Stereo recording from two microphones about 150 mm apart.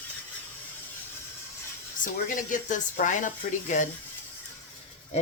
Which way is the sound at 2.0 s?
65° left (ahead or behind).